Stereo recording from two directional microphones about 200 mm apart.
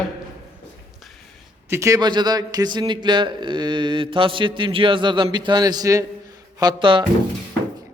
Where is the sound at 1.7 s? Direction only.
15° right (ahead or behind).